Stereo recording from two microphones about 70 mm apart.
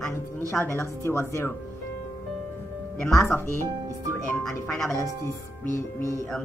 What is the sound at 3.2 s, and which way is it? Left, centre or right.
Speech, left.